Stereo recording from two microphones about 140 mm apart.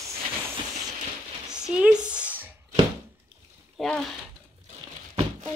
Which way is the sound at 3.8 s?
5° left (ahead or behind).